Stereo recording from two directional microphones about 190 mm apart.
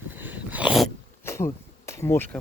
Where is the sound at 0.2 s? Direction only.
10° right (ahead or behind).